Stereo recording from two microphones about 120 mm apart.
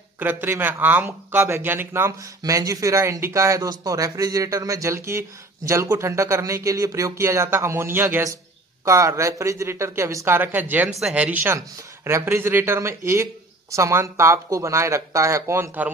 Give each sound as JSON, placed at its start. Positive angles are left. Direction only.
{"t": 0.2, "sound": "speech", "side_deg": -15}
{"t": 11.4, "sound": "speech", "side_deg": -20}